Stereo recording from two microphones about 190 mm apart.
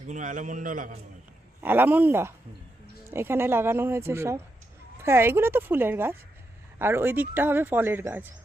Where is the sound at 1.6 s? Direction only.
10° right (ahead or behind).